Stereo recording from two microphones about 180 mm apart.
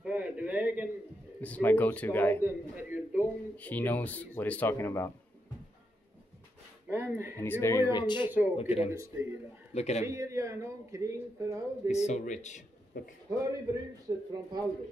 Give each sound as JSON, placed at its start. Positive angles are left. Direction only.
{"t": 0.0, "sound": "a sound", "side_deg": -5}
{"t": 1.4, "sound": "speech", "side_deg": 10}
{"t": 2.4, "sound": "a sound", "side_deg": -10}
{"t": 3.5, "sound": "speech", "side_deg": 10}
{"t": 6.9, "sound": "a sound", "side_deg": -15}
{"t": 7.3, "sound": "speech", "side_deg": 10}
{"t": 7.9, "sound": "speech", "side_deg": 25}
{"t": 8.3, "sound": "speech", "side_deg": -10}
{"t": 8.5, "sound": "speech", "side_deg": 35}
{"t": 8.9, "sound": "speech", "side_deg": -15}
{"t": 9.8, "sound": "speech", "side_deg": 40}
{"t": 10.0, "sound": "speech", "side_deg": -15}
{"t": 11.9, "sound": "a man's voice", "side_deg": 40}
{"t": 14.0, "sound": "speech", "side_deg": -20}